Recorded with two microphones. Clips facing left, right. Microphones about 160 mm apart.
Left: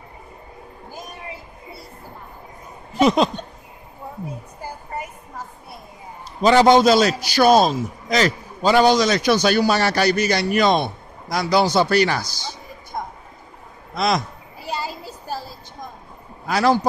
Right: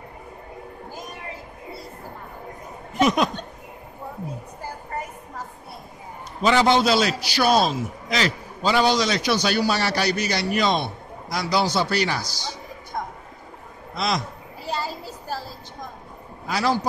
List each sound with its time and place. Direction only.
2.9 s speech: 30° left (ahead or behind)
6.4 s a man's voice: 40° left (ahead or behind); by 12.3 s 55° left (ahead or behind)
12.9 s a sound: 15° left (ahead or behind)
13.9 s a man's voice: 55° left (ahead or behind)
14.6 s a sound: 15° left (ahead or behind)
16.4 s a man's voice: 55° left (ahead or behind)